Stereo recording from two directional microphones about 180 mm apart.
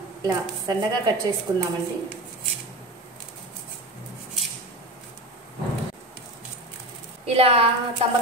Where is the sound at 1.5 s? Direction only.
30° right (ahead or behind).